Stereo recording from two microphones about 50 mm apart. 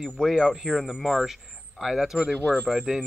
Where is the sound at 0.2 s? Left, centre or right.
Centre.